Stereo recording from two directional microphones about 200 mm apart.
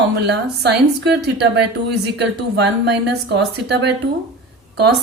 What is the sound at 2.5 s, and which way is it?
A woman's voice, 55° right (ahead or behind).